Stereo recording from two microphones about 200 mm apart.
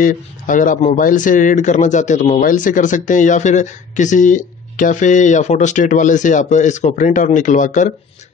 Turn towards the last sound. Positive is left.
turn(degrees=40)  # may be behind; listen again after turning